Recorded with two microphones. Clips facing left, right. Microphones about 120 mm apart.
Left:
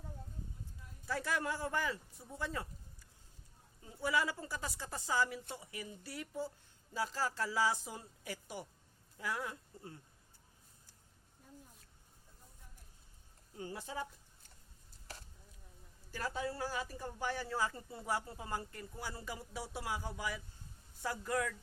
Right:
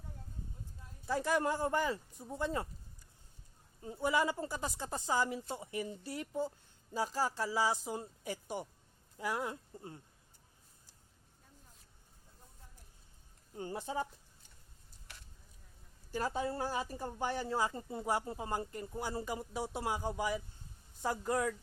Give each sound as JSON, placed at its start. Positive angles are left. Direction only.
{"t": 1.0, "sound": "a woman's voice", "side_deg": -20}
{"t": 3.8, "sound": "a woman's voice", "side_deg": -25}
{"t": 13.6, "sound": "a woman's voice", "side_deg": -30}
{"t": 16.1, "sound": "a woman's voice", "side_deg": -20}